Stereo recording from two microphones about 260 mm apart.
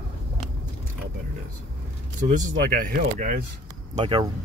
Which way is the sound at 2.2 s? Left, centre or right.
Right.